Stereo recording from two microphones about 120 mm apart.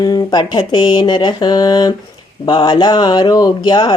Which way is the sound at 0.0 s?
35° left (ahead or behind).